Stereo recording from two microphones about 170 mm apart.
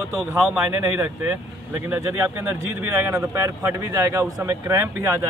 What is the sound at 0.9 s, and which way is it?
Speech, 10° right (ahead or behind).